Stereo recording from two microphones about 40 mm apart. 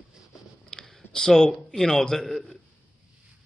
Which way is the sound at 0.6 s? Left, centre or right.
Centre.